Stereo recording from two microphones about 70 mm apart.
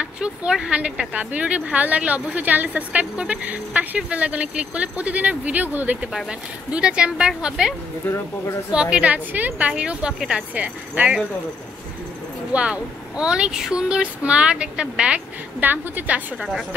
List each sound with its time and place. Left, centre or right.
0.0 s speech: centre
8.0 s speech: left
8.9 s speech: centre
12.5 s speech: centre
15.6 s speech: right
16.3 s a woman's voice: centre